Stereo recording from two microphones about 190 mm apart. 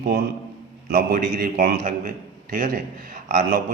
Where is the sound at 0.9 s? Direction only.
50° right (ahead or behind).